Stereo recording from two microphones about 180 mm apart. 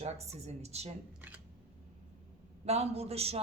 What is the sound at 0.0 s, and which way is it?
Speech, 35° right (ahead or behind).